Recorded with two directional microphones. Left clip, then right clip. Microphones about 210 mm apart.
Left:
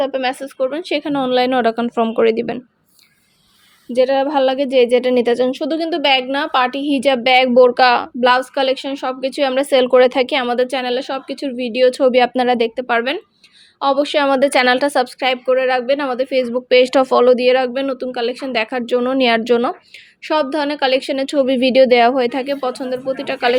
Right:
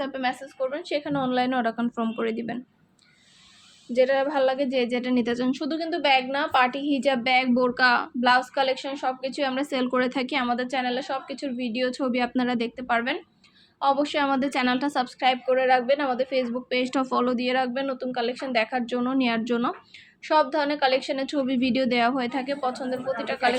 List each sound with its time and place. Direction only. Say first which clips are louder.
0.0 s a woman's voice: left 9 dB; 50° left (ahead or behind)
3.9 s a woman's voice: left 7 dB; 40° left (ahead or behind)